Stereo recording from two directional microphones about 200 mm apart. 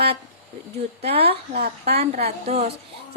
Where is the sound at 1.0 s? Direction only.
30° right (ahead or behind).